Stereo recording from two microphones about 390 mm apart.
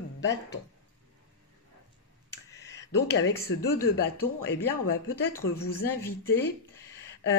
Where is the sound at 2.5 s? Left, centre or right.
Centre.